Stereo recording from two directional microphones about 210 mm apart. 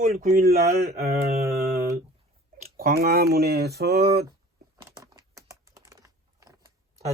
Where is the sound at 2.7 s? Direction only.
45° right (ahead or behind).